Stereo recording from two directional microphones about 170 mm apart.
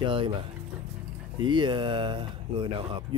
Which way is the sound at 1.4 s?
25° right (ahead or behind).